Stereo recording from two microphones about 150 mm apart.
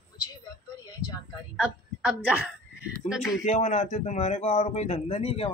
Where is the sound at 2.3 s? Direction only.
5° right (ahead or behind).